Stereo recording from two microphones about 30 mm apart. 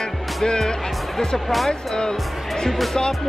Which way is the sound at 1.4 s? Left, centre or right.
Centre.